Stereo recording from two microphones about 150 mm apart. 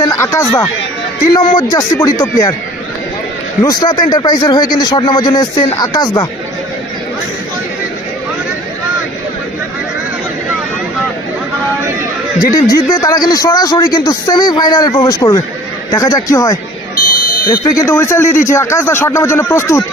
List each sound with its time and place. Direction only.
0.0 s a sound: 20° left (ahead or behind)
1.3 s a man's voice: 30° left (ahead or behind)
3.6 s a man's voice: 25° left (ahead or behind)
12.5 s a man's voice: 25° left (ahead or behind)